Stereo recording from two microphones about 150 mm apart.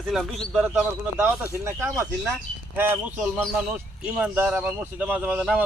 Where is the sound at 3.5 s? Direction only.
10° right (ahead or behind).